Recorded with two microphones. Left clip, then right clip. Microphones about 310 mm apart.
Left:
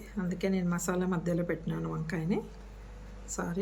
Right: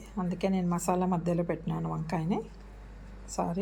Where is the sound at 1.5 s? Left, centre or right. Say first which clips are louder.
Right 1 dB; left.